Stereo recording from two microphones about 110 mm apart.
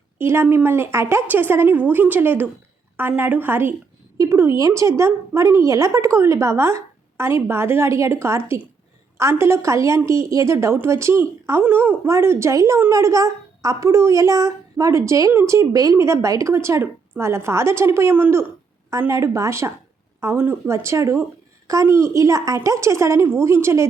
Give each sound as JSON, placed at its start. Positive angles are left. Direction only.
{"t": 0.2, "sound": "a woman's voice", "side_deg": -20}